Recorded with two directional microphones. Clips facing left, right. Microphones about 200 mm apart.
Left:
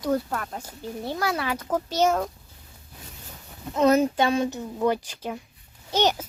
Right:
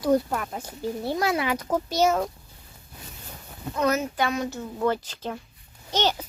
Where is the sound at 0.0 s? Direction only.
10° right (ahead or behind).